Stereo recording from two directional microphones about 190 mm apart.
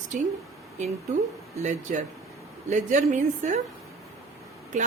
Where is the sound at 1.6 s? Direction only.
40° right (ahead or behind).